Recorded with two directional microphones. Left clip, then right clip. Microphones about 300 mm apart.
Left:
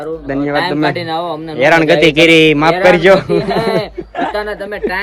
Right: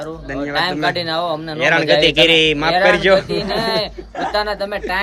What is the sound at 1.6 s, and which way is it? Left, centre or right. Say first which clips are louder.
A man's voice: left 5 dB; centre.